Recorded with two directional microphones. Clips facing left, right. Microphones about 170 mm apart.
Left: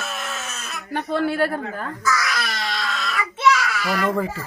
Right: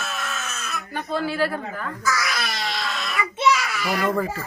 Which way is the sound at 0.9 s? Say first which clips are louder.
Left 4 dB; 65° left (ahead or behind).